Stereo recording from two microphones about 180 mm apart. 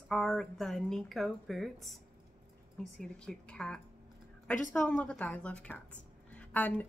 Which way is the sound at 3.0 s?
5° left (ahead or behind).